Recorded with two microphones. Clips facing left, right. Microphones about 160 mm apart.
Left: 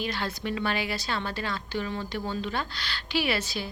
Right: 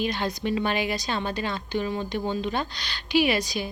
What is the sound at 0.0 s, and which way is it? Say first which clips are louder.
Speech: right 4 dB; 20° right (ahead or behind).